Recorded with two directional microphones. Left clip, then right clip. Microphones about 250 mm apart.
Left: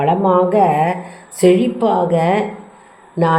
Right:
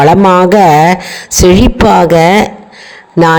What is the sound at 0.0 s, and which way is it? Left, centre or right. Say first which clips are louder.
Speech: right 9 dB; right.